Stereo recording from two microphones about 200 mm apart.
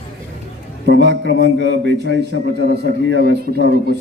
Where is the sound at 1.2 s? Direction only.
80° left.